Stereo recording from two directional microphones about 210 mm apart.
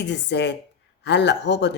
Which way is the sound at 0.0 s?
55° left (ahead or behind).